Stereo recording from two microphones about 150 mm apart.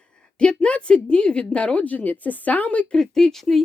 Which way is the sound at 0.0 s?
5° left (ahead or behind).